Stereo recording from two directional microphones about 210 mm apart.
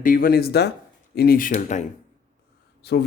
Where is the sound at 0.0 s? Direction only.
40° left (ahead or behind).